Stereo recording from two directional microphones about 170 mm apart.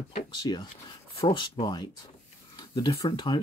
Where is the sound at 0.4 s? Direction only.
25° left (ahead or behind).